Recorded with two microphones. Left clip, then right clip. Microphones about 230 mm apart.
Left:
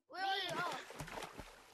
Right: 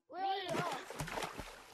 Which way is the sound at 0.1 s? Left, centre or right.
Left.